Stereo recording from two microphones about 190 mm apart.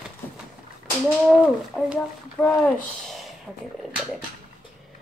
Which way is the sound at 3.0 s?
Centre (ahead or behind).